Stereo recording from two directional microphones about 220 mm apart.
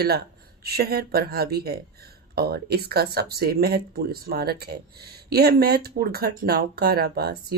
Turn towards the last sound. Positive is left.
turn(degrees=-45)  # may be behind; listen again after turning